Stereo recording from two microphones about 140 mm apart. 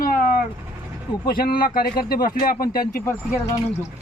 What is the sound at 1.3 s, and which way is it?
Speech, 90° left.